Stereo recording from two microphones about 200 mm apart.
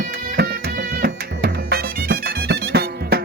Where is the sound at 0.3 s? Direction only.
50° right (ahead or behind).